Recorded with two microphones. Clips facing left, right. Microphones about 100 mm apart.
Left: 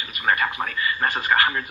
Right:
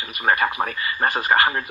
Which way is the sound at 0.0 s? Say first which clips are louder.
Right 2 dB; 35° right (ahead or behind).